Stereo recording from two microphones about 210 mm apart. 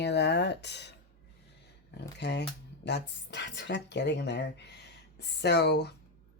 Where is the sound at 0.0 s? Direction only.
50° left (ahead or behind).